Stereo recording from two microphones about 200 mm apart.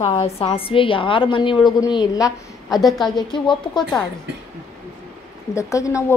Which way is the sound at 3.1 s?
20° left (ahead or behind).